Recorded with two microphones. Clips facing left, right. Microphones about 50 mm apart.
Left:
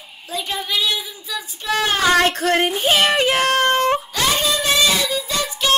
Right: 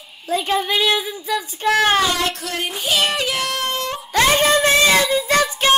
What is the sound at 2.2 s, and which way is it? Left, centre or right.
Speech, left.